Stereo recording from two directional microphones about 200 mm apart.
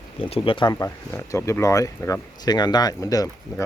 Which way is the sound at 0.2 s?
30° left (ahead or behind).